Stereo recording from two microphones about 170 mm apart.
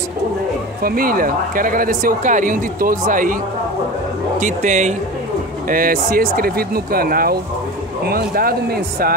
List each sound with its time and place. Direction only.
0.8 s speech: 55° right (ahead or behind)
4.4 s speech: 45° right (ahead or behind)